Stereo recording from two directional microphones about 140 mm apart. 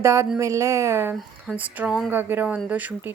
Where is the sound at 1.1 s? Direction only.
5° right (ahead or behind).